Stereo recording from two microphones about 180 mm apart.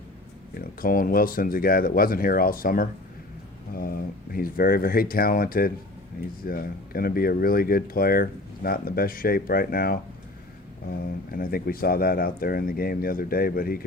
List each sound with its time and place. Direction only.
0.5 s speech: 55° left (ahead or behind)
11.3 s speech: 55° left (ahead or behind)